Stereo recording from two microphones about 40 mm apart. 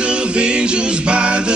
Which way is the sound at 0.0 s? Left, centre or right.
Right.